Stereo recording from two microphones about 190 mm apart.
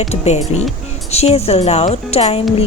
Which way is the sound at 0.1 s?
35° left (ahead or behind).